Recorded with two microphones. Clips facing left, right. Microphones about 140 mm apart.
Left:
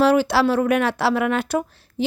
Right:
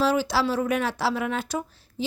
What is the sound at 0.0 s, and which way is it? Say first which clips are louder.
A woman's voice: left 6 dB; 65° left (ahead or behind).